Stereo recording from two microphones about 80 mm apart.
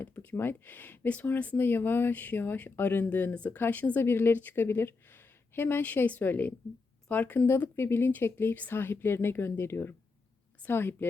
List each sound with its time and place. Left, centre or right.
0.0 s speech: left